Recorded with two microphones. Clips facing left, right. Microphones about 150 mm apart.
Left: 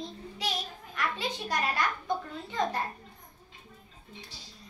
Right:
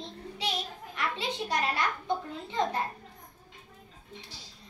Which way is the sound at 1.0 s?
25° right (ahead or behind).